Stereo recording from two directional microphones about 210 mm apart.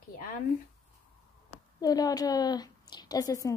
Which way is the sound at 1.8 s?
20° left (ahead or behind).